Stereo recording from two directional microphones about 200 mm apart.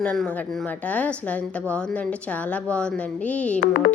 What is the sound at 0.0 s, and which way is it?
A woman's voice, 5° left (ahead or behind).